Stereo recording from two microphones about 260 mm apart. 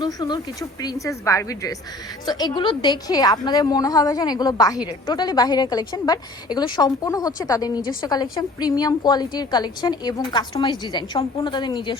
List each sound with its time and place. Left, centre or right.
0.0 s a woman's voice: centre